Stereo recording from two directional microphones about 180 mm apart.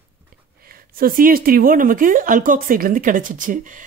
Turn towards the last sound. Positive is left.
turn(degrees=-50)  # may be behind; listen again after turning